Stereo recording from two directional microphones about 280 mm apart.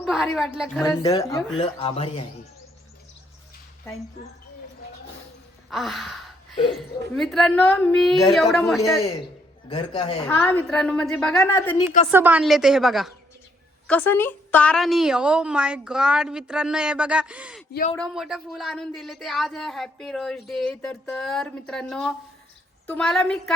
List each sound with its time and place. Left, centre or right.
0.0 s a woman's voice: centre
0.9 s speech: centre
5.7 s gasp: centre
7.2 s a woman's voice: centre
9.6 s speech: centre
10.2 s a woman's voice: centre
12.1 s a woman's voice: centre